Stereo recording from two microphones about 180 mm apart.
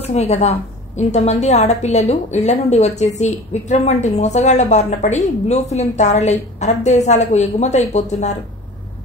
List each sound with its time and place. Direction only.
0.0 s a woman's voice: 35° left (ahead or behind)